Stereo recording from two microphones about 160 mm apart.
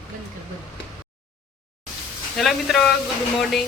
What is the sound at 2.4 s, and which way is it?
A woman's voice, centre (ahead or behind).